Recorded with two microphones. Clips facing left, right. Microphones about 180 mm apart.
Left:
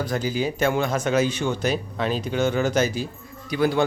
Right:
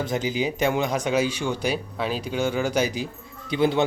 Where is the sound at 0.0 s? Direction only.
20° right (ahead or behind).